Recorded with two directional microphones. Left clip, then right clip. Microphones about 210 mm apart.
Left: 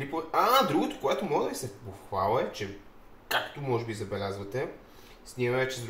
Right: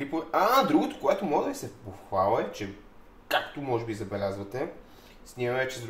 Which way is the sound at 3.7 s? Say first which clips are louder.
Right 1 dB; 35° right (ahead or behind).